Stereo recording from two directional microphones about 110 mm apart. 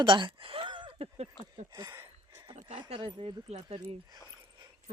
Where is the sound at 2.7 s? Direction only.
50° right (ahead or behind).